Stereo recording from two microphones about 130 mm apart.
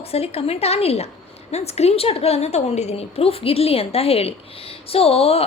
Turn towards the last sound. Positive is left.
turn(degrees=50)  # may be behind; listen again after turning